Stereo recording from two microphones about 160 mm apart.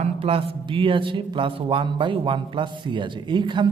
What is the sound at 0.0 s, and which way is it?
A man's voice, 35° right (ahead or behind).